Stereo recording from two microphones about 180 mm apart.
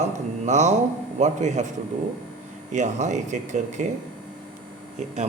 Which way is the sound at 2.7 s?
40° right (ahead or behind).